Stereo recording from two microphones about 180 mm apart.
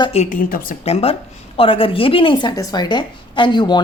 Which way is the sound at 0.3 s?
50° left (ahead or behind).